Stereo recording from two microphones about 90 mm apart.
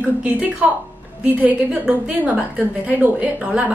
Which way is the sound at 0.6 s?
15° right (ahead or behind).